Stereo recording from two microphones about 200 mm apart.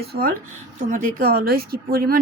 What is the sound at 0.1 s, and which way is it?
A woman's voice, 50° right (ahead or behind).